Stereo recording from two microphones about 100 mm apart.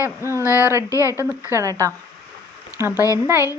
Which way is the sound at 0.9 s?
30° left (ahead or behind).